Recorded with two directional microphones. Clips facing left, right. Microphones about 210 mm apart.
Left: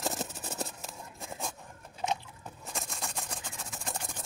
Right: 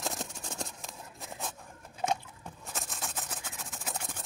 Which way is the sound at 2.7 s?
Centre (ahead or behind).